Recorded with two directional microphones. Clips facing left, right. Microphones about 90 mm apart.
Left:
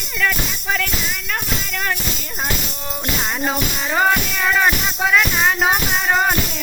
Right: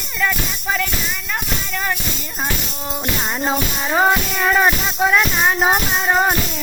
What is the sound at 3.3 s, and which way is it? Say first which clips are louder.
Music: right 1 dB; 15° right (ahead or behind).